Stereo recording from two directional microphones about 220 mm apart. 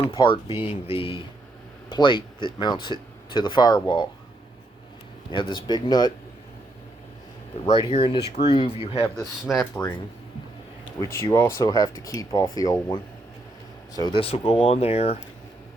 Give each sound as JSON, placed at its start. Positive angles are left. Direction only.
{"t": 0.0, "sound": "speech", "side_deg": 25}
{"t": 5.3, "sound": "speech", "side_deg": 20}
{"t": 7.6, "sound": "speech", "side_deg": 25}
{"t": 9.5, "sound": "speech", "side_deg": 0}
{"t": 11.0, "sound": "speech", "side_deg": 15}